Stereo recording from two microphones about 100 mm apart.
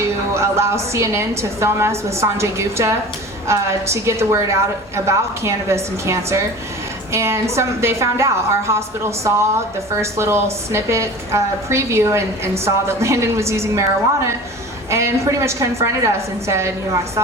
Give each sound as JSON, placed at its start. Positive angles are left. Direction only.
{"t": 0.3, "sound": "a woman's voice", "side_deg": -25}
{"t": 14.8, "sound": "a woman's voice", "side_deg": -30}